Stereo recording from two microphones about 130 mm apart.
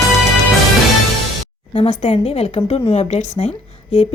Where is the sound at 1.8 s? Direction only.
55° left (ahead or behind).